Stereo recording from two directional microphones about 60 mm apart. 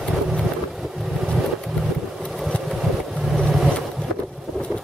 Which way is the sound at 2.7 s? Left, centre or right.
Centre.